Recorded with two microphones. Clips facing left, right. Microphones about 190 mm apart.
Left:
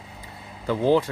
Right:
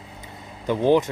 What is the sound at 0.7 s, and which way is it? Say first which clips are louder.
Speech: right 2 dB; 20° right (ahead or behind).